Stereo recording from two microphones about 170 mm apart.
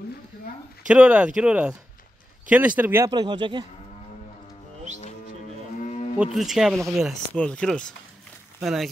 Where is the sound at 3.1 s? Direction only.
25° right (ahead or behind).